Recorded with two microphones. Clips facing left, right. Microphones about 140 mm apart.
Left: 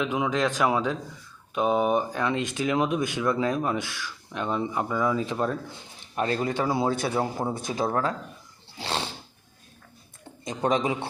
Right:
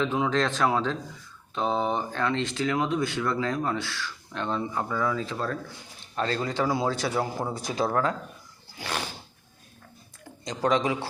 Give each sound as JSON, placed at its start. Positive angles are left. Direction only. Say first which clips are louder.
{"t": 0.0, "sound": "a man's voice", "louder": "even", "side_deg": 10}
{"t": 8.8, "sound": "a sound", "louder": "left 2 dB", "side_deg": 25}
{"t": 10.2, "sound": "speech", "louder": "even", "side_deg": 25}